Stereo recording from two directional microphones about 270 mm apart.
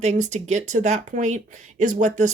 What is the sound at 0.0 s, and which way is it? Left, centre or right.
Speech, right.